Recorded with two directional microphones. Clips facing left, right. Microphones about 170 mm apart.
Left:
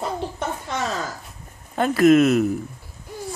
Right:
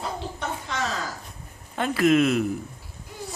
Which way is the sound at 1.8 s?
45° left (ahead or behind).